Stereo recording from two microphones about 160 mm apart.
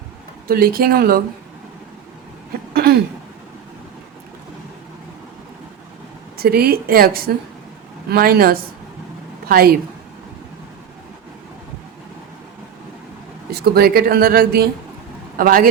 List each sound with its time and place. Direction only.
0.4 s speech: 65° right (ahead or behind)
2.7 s throat clearing: 75° right (ahead or behind)
6.3 s speech: 75° right (ahead or behind)
13.5 s speech: 75° right (ahead or behind)